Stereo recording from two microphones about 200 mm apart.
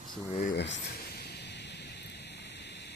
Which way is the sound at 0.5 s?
60° left (ahead or behind).